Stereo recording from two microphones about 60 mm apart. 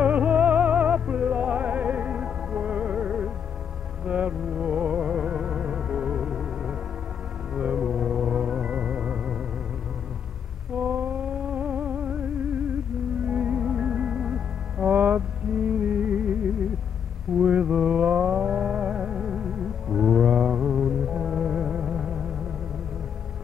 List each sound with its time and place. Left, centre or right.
0.0 s music: right
10.8 s music: right